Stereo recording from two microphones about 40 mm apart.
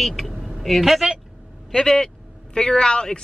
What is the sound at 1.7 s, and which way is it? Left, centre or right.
Speech, centre.